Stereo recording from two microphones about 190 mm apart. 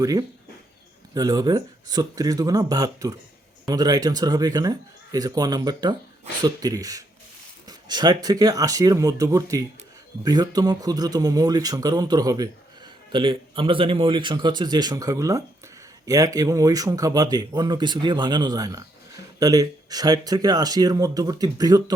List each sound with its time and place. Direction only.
0.0 s speech: 20° right (ahead or behind)